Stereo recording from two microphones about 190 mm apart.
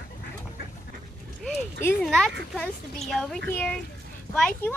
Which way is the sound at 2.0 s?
Centre (ahead or behind).